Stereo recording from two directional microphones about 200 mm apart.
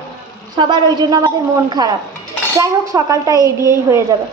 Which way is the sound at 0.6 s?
25° right (ahead or behind).